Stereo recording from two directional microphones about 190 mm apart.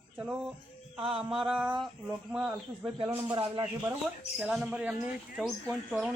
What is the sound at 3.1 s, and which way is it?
Speech, 25° right (ahead or behind).